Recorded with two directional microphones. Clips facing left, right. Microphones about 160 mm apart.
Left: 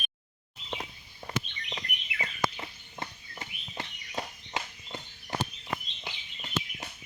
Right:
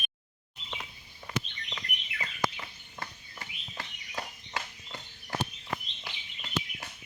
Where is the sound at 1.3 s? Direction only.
35° left (ahead or behind); by 6.8 s 20° left (ahead or behind).